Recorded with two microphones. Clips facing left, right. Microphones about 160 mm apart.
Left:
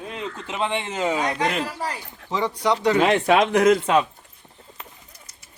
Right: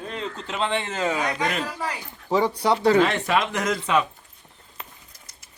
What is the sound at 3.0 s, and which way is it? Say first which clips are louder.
Speech: left 5 dB; 70° left (ahead or behind).